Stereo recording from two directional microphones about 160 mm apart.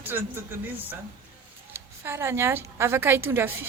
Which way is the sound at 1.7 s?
15° right (ahead or behind).